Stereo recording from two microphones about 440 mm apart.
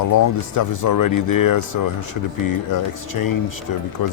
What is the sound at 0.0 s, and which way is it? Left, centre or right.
Speech, left.